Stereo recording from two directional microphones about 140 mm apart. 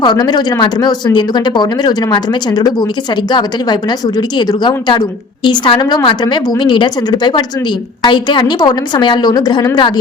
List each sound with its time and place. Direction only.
0.0 s speech: 30° left (ahead or behind)